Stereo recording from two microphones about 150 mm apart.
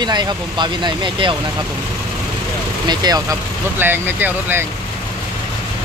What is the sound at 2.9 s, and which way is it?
Speech, 25° right (ahead or behind).